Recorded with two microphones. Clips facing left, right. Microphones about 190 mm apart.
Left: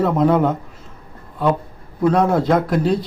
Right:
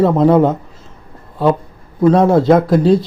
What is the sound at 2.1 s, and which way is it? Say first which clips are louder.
Speech: right 6 dB; 30° right (ahead or behind).